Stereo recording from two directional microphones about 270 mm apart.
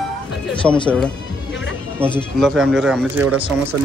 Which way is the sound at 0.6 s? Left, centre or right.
Centre.